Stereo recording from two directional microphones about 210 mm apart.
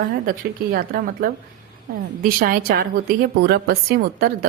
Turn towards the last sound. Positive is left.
turn(degrees=-45)  # may be behind; listen again after turning